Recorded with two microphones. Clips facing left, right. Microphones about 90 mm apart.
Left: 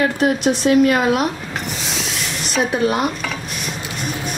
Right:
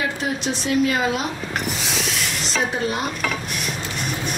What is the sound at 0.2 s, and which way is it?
A woman's voice, 60° left (ahead or behind).